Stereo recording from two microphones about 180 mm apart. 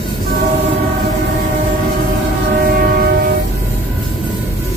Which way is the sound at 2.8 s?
55° right (ahead or behind).